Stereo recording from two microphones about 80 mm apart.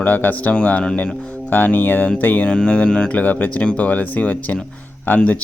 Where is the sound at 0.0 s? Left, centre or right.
Left.